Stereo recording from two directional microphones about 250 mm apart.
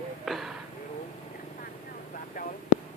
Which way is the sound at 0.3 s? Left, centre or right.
Centre.